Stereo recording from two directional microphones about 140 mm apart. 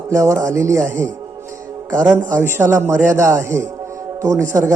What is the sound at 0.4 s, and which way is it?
Speech, 20° right (ahead or behind).